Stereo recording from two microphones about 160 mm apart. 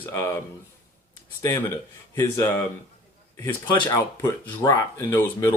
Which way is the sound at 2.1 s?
15° left (ahead or behind).